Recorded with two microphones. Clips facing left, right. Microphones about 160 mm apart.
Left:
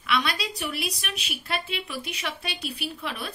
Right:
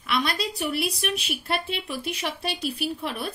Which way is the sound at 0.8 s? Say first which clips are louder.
Right 6 dB; 55° right (ahead or behind).